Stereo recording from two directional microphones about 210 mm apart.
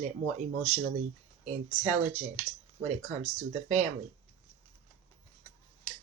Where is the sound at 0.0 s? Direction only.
35° right (ahead or behind).